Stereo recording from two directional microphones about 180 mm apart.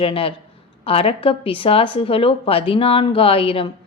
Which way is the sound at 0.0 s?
30° left (ahead or behind).